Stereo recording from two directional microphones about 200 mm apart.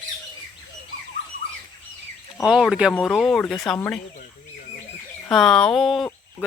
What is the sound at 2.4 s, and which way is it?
Speech, 5° right (ahead or behind).